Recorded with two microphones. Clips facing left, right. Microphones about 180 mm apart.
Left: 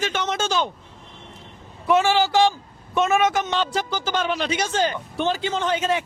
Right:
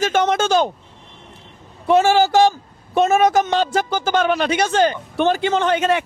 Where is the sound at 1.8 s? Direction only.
40° right (ahead or behind).